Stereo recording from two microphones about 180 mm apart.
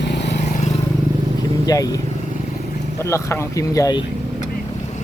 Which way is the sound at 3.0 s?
15° left (ahead or behind).